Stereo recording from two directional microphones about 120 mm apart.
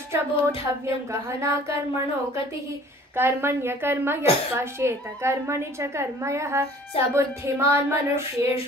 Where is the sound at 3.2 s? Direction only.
20° right (ahead or behind).